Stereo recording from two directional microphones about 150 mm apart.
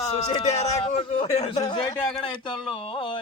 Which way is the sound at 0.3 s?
45° left (ahead or behind).